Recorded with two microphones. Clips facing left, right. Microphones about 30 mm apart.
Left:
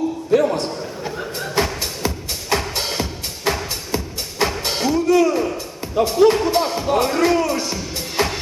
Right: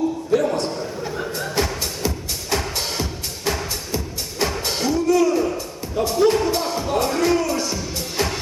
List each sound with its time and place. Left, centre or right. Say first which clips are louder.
0.3 s music: left 4 dB; centre